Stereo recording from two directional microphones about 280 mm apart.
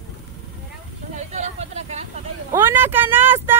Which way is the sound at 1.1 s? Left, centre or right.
Right.